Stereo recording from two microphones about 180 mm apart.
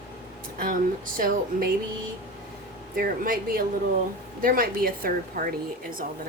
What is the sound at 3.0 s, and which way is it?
A woman's voice, 50° right (ahead or behind).